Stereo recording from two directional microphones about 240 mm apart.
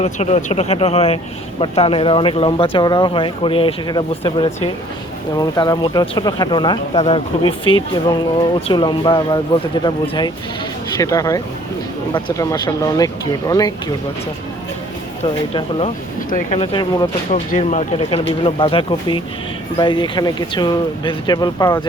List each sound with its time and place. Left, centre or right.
0.0 s speech: left
15.2 s speech: left